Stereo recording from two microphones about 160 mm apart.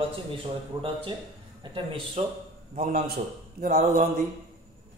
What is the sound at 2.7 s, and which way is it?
A man's voice, 65° right (ahead or behind).